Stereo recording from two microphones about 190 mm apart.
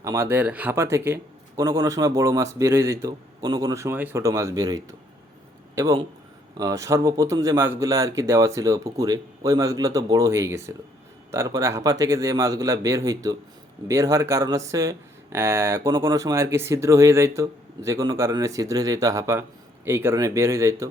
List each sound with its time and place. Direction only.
0.0 s speech: 15° right (ahead or behind)